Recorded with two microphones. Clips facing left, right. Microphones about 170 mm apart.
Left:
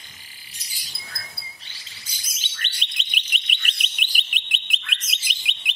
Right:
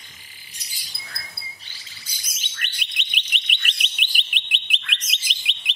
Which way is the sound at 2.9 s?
40° left (ahead or behind).